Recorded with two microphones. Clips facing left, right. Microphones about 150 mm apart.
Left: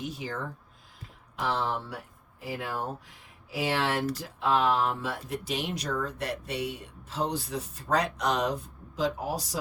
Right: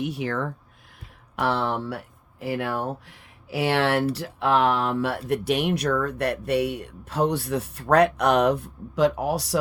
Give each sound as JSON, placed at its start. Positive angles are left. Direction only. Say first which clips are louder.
{"t": 0.0, "sound": "speech", "louder": "right 8 dB", "side_deg": -65}
{"t": 0.9, "sound": "a sound", "louder": "right 7 dB", "side_deg": -65}
{"t": 2.4, "sound": "speech", "louder": "right 7 dB", "side_deg": -70}